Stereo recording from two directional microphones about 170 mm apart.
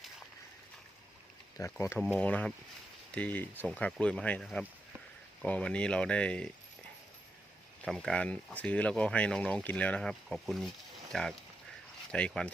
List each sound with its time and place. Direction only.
1.6 s speech: 20° left (ahead or behind)
2.0 s speech: 5° left (ahead or behind)
7.9 s speech: centre (ahead or behind)